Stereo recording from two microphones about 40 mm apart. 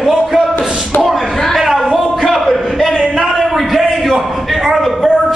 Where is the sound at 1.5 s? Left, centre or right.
Centre.